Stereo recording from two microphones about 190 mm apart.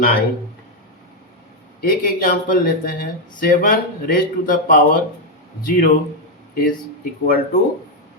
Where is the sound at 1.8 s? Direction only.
50° left (ahead or behind).